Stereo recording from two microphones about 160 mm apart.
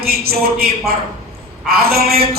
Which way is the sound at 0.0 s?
70° right (ahead or behind).